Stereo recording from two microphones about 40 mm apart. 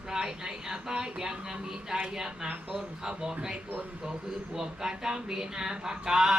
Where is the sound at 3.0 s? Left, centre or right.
Centre.